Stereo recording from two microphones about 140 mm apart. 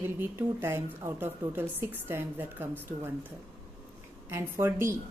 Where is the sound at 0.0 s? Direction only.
15° right (ahead or behind).